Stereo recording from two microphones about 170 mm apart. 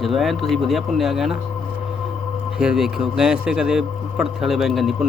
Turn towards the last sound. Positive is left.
turn(degrees=0)  # may be behind; listen again after turning